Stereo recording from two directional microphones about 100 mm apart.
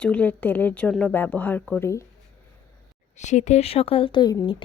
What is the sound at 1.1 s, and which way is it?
Speech, 20° left (ahead or behind).